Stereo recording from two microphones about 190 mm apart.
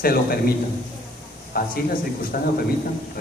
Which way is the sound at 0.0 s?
50° left (ahead or behind).